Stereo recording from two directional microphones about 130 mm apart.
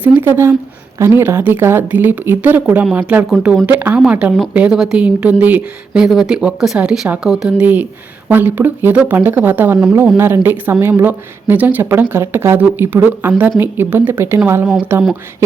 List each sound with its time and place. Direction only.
0.0 s a woman's voice: 15° right (ahead or behind)
3.2 s speech: centre (ahead or behind)
3.7 s a woman's voice: 15° right (ahead or behind)